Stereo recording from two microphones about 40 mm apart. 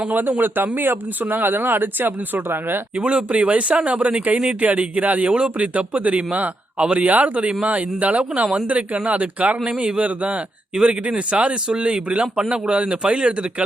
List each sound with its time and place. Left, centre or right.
0.1 s speech: right
2.9 s speech: right
7.1 s speech: right
9.6 s speech: right
11.7 s speech: right